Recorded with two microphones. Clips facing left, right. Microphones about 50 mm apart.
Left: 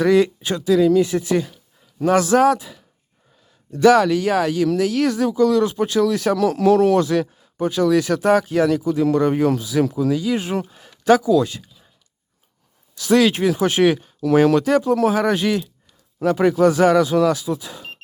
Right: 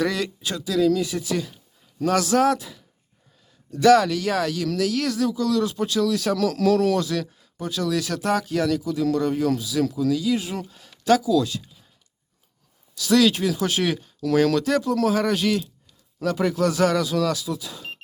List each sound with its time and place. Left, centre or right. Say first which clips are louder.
0.0 s speech: left 9 dB; left
3.8 s speech: left 3 dB; centre; by 10.7 s left
10.7 s a sound: left 4 dB; left
11.2 s speech: left 4 dB; left
13.0 s speech: left 3 dB; left